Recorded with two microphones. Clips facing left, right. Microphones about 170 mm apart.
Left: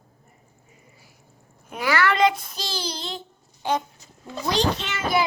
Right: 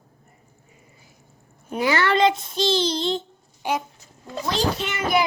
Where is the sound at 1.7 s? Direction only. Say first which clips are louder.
Right 2 dB; 25° right (ahead or behind).